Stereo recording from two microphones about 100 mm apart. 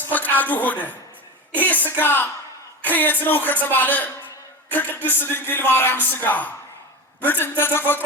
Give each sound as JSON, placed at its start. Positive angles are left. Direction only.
{"t": 0.0, "sound": "a woman's voice", "side_deg": 20}